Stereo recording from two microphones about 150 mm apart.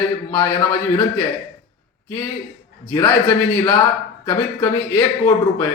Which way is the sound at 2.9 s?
15° left (ahead or behind).